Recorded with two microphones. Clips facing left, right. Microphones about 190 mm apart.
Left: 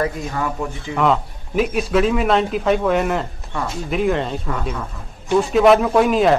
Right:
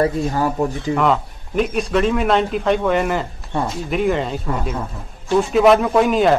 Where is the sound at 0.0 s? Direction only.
35° right (ahead or behind).